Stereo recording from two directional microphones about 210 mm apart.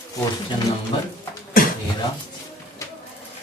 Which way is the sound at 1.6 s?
45° left (ahead or behind).